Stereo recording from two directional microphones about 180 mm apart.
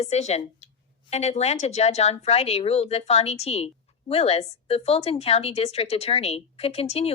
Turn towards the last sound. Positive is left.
turn(degrees=35)  # may be behind; listen again after turning